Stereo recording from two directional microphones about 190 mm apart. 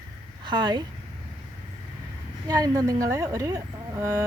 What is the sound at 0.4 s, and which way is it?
Speech, 25° right (ahead or behind).